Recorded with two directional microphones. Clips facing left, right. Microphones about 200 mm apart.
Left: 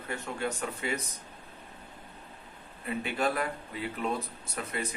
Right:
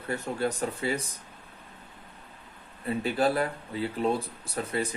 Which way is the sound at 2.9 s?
35° right (ahead or behind).